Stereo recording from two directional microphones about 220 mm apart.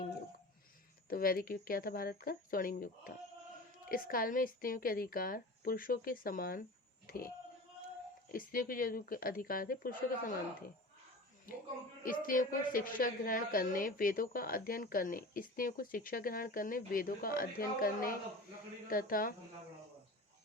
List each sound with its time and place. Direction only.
1.1 s a woman's voice: 40° left (ahead or behind)
8.3 s a woman's voice: 40° left (ahead or behind)
12.0 s a woman's voice: 40° left (ahead or behind)